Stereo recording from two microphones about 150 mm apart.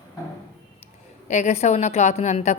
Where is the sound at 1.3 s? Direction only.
50° left (ahead or behind).